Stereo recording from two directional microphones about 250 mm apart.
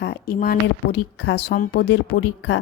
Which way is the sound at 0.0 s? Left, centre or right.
Left.